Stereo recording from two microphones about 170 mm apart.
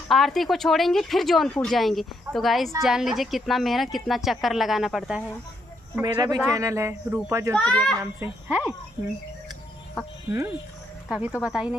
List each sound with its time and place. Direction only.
0.1 s speech: centre (ahead or behind)
6.0 s speech: 20° right (ahead or behind)
7.5 s a child's voice: 5° left (ahead or behind)
7.9 s speech: 10° right (ahead or behind)
11.1 s speech: 10° right (ahead or behind)